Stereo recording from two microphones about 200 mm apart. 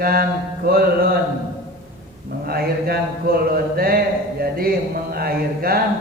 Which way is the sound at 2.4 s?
50° right (ahead or behind).